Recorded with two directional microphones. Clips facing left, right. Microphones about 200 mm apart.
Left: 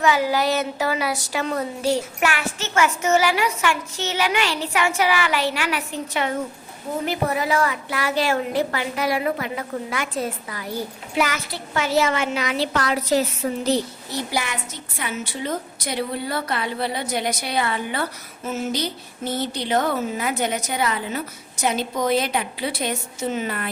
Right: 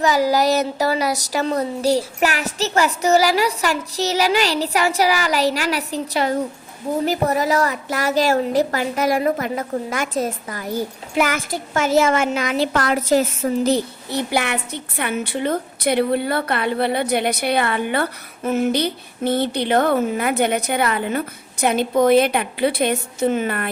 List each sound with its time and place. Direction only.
0.0 s a woman's voice: 40° right (ahead or behind); by 23.6 s 55° right (ahead or behind)